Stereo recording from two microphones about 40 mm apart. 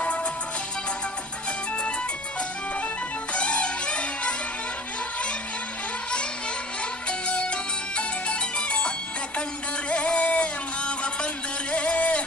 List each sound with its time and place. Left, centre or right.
0.0 s music: left
3.3 s music: left
7.1 s music: left